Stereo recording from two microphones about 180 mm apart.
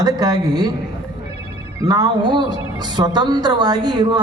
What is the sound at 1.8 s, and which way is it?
A woman's voice, 20° right (ahead or behind).